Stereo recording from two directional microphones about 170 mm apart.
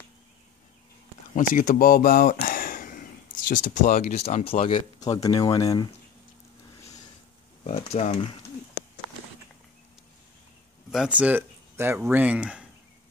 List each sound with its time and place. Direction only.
1.3 s speech: 50° left (ahead or behind); by 5.9 s 20° left (ahead or behind)
7.6 s speech: 40° left (ahead or behind)
10.9 s speech: 5° right (ahead or behind)